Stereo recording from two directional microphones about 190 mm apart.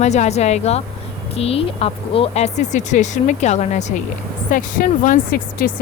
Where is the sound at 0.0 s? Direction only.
35° left (ahead or behind).